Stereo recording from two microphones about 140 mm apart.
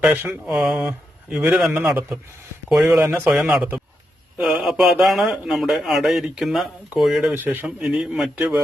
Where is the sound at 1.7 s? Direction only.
10° right (ahead or behind).